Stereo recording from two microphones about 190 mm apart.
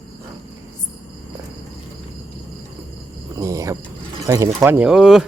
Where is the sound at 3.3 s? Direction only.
15° right (ahead or behind).